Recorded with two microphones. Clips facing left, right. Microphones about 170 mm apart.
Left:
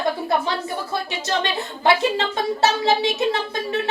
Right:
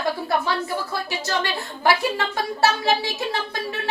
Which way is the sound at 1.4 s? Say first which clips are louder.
Left 2 dB; 25° left (ahead or behind).